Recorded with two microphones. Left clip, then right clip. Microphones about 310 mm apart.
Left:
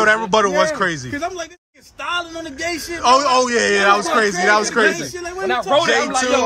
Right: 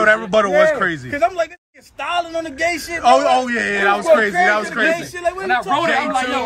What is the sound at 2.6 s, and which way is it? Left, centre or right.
A man's voice, centre.